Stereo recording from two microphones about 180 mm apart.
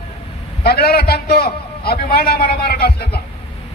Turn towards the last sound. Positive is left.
turn(degrees=60)  # may be behind; listen again after turning